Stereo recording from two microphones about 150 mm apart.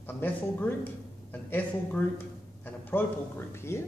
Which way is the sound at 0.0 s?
15° left (ahead or behind).